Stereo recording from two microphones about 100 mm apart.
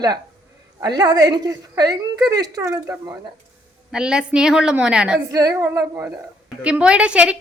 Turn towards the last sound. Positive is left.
turn(degrees=-10)  # may be behind; listen again after turning